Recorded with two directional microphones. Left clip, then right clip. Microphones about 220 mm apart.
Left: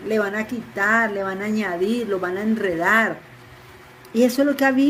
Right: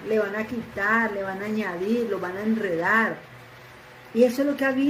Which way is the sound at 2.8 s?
45° left (ahead or behind).